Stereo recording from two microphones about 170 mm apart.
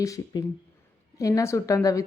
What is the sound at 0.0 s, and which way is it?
Speech, 20° left (ahead or behind).